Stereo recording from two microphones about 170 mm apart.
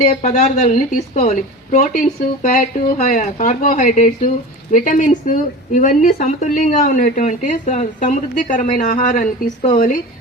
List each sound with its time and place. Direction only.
0.0 s a woman's voice: 45° left (ahead or behind)